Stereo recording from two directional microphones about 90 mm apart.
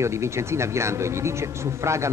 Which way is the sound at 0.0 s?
30° right (ahead or behind).